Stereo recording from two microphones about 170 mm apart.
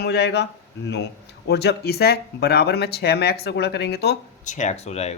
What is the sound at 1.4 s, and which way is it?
Speech, 75° left (ahead or behind).